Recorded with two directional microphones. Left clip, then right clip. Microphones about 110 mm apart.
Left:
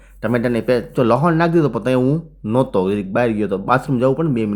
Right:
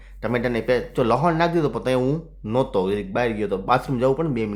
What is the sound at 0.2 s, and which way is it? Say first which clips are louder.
Speech: left 4 dB; 25° left (ahead or behind).